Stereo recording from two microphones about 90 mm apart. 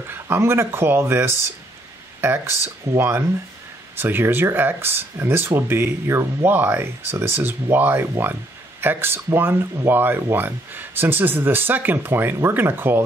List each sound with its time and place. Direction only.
0.1 s speech: 25° right (ahead or behind)